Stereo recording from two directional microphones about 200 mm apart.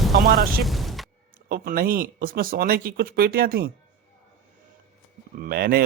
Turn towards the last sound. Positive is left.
turn(degrees=-50)  # may be behind; listen again after turning